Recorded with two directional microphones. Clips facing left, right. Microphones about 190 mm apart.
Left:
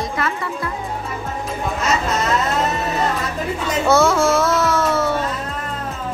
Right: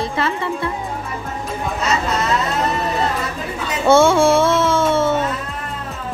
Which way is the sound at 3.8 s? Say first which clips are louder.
Right 4 dB; 30° right (ahead or behind).